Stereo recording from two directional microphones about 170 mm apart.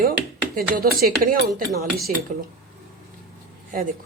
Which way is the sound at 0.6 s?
55° right (ahead or behind).